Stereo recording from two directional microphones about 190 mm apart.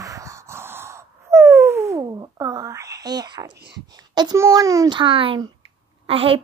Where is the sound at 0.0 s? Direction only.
15° right (ahead or behind).